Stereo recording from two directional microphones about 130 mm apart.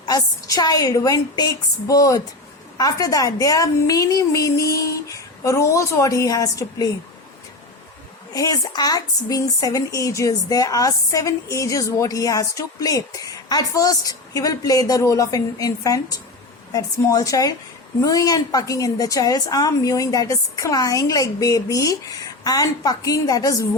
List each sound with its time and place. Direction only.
0.0 s speech: 30° left (ahead or behind)
8.3 s speech: 30° left (ahead or behind)